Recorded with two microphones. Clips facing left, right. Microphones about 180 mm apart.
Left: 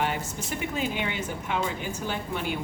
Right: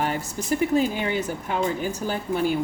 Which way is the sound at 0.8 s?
40° right (ahead or behind).